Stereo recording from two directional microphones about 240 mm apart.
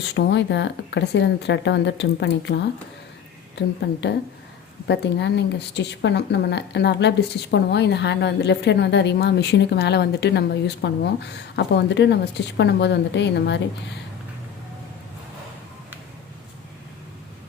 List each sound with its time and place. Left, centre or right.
0.0 s speech: left
4.9 s speech: left